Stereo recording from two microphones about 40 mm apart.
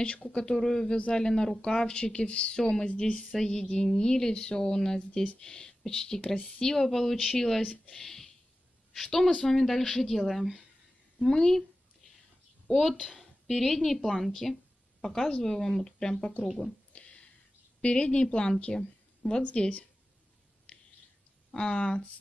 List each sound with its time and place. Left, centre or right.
0.0 s speech: left
3.2 s a woman's voice: centre
11.1 s a woman's voice: centre
12.7 s a woman's voice: centre
16.9 s a sound: left
17.8 s speech: left
18.8 s a sound: centre
19.4 s speech: left
20.7 s a sound: left
21.5 s speech: left